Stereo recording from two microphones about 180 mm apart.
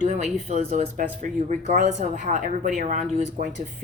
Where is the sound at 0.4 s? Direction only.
40° right (ahead or behind).